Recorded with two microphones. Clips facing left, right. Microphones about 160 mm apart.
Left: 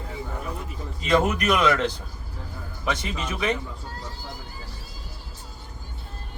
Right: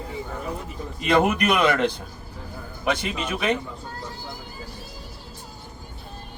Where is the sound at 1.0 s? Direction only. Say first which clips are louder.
Right 2 dB; 60° right (ahead or behind).